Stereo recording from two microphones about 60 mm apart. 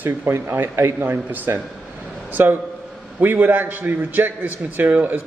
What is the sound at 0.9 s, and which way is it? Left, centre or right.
A man's voice, right.